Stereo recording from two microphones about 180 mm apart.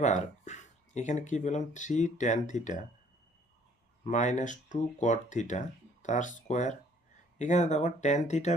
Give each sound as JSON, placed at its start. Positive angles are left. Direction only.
{"t": 0.0, "sound": "speech", "side_deg": 40}
{"t": 4.0, "sound": "speech", "side_deg": 40}